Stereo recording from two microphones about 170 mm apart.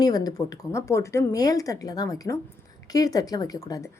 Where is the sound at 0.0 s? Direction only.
20° left (ahead or behind).